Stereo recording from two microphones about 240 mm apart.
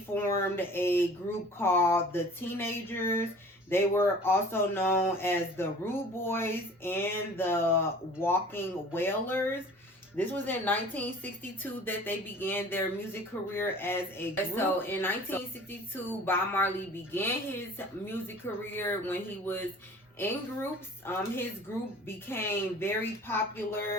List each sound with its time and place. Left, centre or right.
0.1 s speech: centre